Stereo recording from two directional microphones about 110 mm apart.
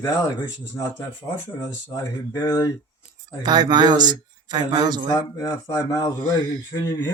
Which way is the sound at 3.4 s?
40° right (ahead or behind).